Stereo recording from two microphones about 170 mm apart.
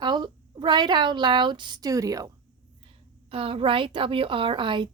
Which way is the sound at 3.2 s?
30° right (ahead or behind).